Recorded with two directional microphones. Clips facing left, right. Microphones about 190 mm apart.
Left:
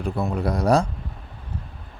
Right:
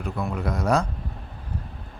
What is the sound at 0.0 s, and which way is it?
Speech, 30° left (ahead or behind).